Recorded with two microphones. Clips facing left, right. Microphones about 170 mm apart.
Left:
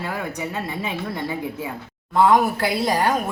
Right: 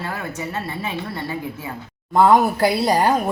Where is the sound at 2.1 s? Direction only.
40° right (ahead or behind).